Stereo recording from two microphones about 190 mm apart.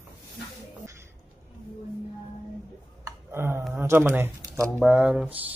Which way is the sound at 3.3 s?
15° right (ahead or behind).